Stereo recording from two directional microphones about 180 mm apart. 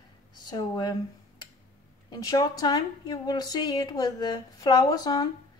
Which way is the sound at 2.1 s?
20° left (ahead or behind).